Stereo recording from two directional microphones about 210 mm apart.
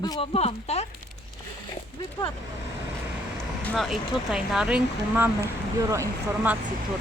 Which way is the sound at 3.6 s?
Centre (ahead or behind).